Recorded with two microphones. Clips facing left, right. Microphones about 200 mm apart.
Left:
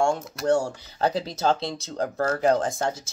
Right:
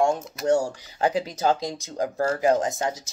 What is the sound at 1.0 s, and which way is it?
Speech, 15° right (ahead or behind).